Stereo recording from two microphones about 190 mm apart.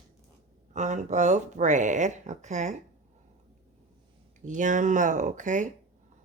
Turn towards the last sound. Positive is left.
turn(degrees=-40)  # may be behind; listen again after turning